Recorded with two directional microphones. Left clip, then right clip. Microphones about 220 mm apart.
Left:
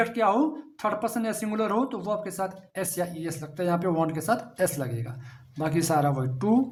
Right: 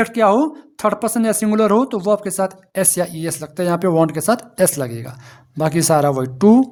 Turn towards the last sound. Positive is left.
turn(degrees=-50)  # may be behind; listen again after turning